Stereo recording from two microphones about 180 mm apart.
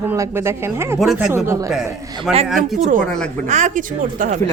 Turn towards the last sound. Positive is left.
turn(degrees=-45)  # may be behind; listen again after turning